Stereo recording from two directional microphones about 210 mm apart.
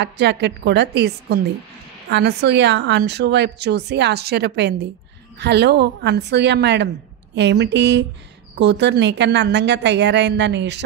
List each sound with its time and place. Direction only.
0.0 s a woman's voice: 55° right (ahead or behind)